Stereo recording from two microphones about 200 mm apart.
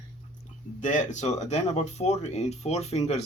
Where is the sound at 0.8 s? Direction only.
40° left (ahead or behind).